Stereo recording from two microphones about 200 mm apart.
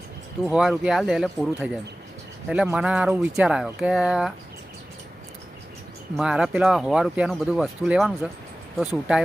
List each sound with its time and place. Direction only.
0.5 s speech: 5° right (ahead or behind)
6.1 s speech: 5° right (ahead or behind)